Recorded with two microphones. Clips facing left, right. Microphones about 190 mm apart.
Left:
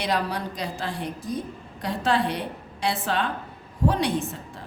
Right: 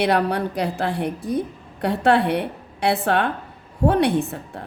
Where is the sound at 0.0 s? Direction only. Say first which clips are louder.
Right 7 dB; 60° right (ahead or behind).